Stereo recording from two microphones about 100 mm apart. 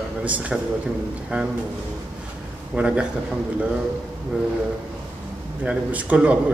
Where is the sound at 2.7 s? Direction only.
10° right (ahead or behind).